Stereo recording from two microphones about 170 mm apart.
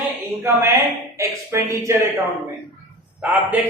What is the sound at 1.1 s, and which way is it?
Speech, 15° right (ahead or behind).